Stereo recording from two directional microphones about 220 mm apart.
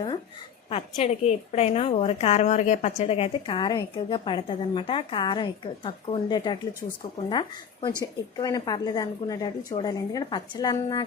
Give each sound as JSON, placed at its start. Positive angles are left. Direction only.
{"t": 0.7, "sound": "a woman's voice", "side_deg": 30}